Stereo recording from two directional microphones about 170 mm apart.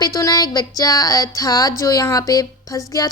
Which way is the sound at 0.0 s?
20° left (ahead or behind).